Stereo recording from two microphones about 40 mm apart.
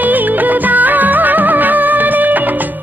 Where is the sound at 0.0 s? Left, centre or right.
Right.